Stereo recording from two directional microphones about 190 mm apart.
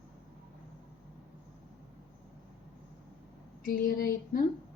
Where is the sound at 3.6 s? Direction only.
50° left (ahead or behind).